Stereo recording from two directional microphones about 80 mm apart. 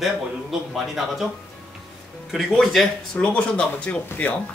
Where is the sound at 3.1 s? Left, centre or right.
Centre.